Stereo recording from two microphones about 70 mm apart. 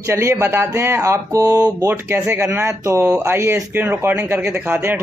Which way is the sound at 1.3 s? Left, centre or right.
Right.